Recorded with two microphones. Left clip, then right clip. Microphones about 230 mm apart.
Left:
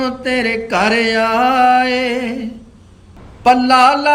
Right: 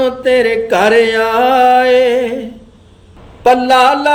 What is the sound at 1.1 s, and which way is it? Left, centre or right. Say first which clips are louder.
Mantra: right 3 dB; centre.